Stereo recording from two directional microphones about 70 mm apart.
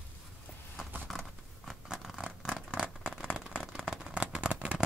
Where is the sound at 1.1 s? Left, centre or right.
Centre.